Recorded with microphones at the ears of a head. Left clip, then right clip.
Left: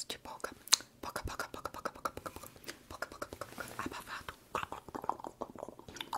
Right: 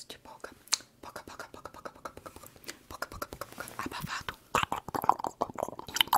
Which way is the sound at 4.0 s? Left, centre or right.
Right.